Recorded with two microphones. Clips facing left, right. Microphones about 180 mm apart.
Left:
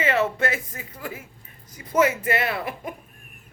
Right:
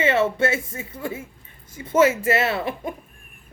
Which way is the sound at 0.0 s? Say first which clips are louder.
Right 3 dB; 25° right (ahead or behind).